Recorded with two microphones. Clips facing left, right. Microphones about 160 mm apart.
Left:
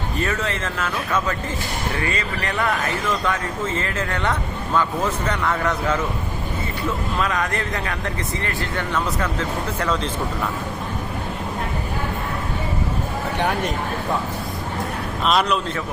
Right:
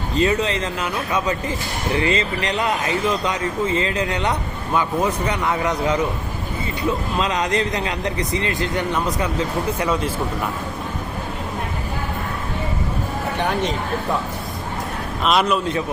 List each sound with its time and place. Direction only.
0.2 s speech: 20° right (ahead or behind)
7.2 s speech: 20° right (ahead or behind)
15.2 s a man's voice: 5° right (ahead or behind)